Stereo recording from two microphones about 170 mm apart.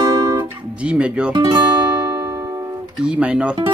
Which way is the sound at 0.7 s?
5° right (ahead or behind).